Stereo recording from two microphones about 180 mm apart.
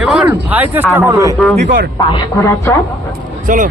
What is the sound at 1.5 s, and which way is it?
Speech, 50° right (ahead or behind).